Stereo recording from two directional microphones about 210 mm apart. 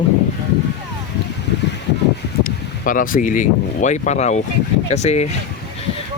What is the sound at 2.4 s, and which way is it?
Speech, 40° left (ahead or behind).